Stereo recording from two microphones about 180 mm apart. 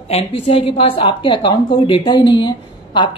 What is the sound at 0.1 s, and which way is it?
A woman's voice, 30° left (ahead or behind).